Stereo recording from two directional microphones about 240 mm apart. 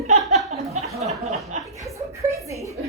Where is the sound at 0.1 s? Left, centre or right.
Right.